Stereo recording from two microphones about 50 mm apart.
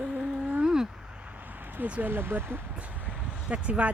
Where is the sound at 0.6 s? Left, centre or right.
Centre.